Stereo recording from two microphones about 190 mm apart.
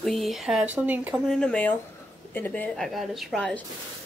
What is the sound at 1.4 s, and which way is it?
Speech, 5° left (ahead or behind).